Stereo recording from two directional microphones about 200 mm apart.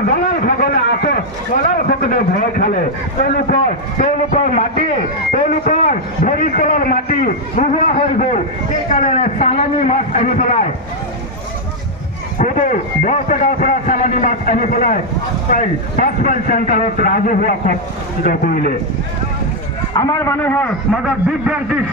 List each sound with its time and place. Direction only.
0.3 s a sound: 50° left (ahead or behind)
1.9 s a man's voice: 45° left (ahead or behind)
12.4 s a man's voice: 40° left (ahead or behind)
16.3 s a man's voice: 40° left (ahead or behind)
19.9 s a man's voice: 20° left (ahead or behind); by 21.7 s 5° right (ahead or behind)